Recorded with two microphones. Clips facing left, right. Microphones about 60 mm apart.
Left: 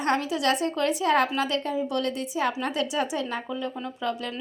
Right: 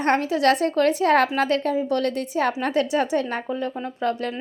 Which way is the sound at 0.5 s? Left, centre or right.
Right.